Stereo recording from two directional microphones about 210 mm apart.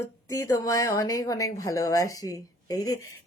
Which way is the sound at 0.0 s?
15° left (ahead or behind).